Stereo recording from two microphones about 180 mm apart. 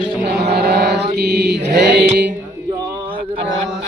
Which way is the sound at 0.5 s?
65° right (ahead or behind).